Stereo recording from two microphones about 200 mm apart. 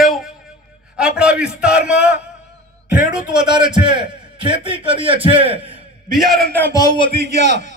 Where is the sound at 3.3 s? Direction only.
20° right (ahead or behind).